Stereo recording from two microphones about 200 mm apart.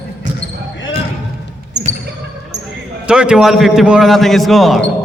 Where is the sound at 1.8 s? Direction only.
60° right (ahead or behind).